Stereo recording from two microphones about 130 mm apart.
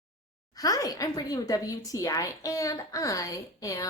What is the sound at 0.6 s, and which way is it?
A woman's voice, 30° left (ahead or behind).